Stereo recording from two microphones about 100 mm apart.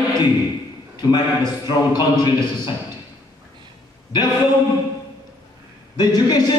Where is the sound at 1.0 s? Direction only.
45° left (ahead or behind).